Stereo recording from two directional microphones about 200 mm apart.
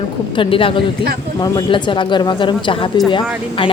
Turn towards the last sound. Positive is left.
turn(degrees=25)  # may be behind; listen again after turning